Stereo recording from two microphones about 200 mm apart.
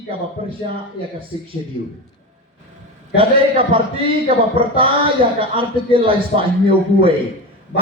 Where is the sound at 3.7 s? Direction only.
25° right (ahead or behind).